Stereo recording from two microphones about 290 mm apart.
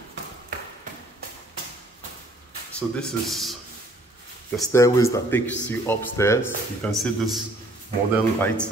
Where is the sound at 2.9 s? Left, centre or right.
Centre.